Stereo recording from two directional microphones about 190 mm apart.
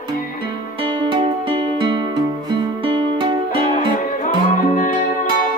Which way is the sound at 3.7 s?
45° left (ahead or behind).